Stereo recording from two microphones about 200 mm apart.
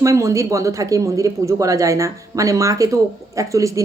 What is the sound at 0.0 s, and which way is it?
Speech, 15° right (ahead or behind).